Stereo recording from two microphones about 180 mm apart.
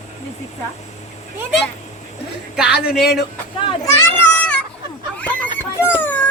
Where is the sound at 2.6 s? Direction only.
5° right (ahead or behind).